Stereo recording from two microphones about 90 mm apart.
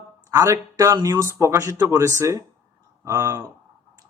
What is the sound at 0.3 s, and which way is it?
Speech, 40° right (ahead or behind).